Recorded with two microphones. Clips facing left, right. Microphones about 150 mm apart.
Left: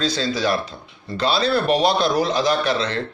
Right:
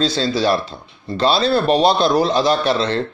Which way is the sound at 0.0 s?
30° right (ahead or behind).